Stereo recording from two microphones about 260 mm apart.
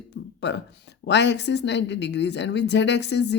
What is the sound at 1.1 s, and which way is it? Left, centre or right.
A woman's voice, left.